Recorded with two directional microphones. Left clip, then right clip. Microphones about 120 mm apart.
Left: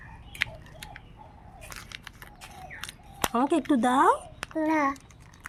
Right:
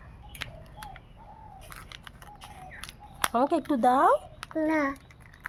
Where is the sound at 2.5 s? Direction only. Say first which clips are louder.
Left 4 dB; 15° left (ahead or behind).